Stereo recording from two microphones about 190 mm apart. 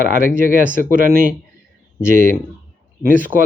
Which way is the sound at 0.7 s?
45° right (ahead or behind).